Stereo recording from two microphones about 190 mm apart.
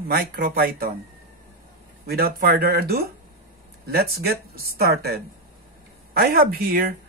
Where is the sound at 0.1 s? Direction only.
50° right (ahead or behind).